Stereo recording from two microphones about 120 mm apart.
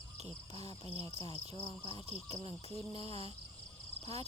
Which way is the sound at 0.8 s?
55° right (ahead or behind).